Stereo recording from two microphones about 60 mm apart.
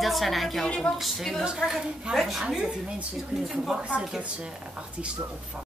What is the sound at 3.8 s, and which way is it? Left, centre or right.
Speech, centre.